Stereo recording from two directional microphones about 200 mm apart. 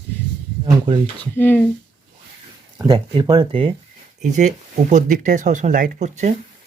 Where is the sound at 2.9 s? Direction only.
20° right (ahead or behind).